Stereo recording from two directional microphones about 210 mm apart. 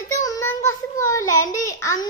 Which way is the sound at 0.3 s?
15° left (ahead or behind).